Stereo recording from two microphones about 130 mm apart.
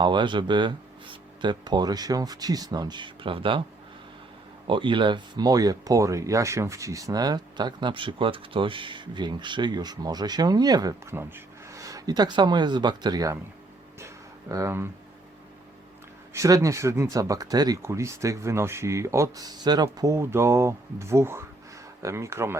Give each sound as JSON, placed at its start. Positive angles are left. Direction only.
{"t": 0.0, "sound": "speech", "side_deg": -35}
{"t": 4.6, "sound": "speech", "side_deg": -40}
{"t": 11.1, "sound": "speech", "side_deg": -15}
{"t": 14.5, "sound": "speech", "side_deg": -20}
{"t": 16.3, "sound": "speech", "side_deg": -25}